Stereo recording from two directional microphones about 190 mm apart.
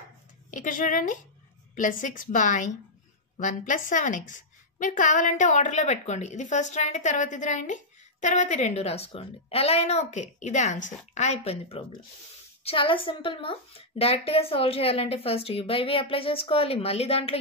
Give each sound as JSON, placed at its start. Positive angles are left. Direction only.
{"t": 0.5, "sound": "a woman's voice", "side_deg": 45}